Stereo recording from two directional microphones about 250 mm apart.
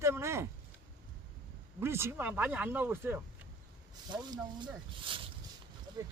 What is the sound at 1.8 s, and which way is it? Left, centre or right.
Speech, centre.